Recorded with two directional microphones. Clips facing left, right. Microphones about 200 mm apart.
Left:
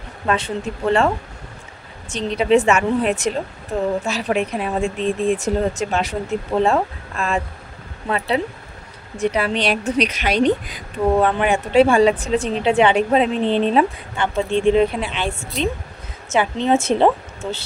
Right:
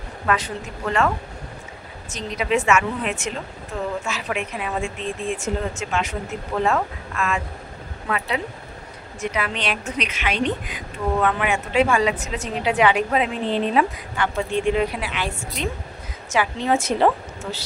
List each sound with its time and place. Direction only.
0.3 s a woman's voice: 30° left (ahead or behind)